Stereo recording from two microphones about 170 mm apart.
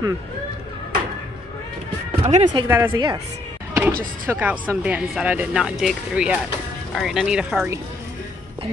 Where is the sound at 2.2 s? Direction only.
30° right (ahead or behind).